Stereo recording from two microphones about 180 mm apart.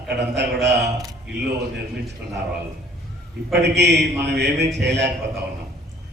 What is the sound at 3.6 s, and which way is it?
A man's voice, 70° right (ahead or behind).